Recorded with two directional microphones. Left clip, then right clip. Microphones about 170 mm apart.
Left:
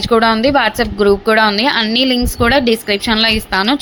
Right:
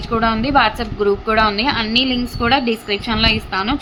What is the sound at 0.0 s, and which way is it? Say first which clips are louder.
A woman's voice: left 7 dB; 30° left (ahead or behind).